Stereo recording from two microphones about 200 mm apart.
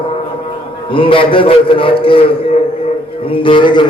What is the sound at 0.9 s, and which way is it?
A man's voice, 25° left (ahead or behind).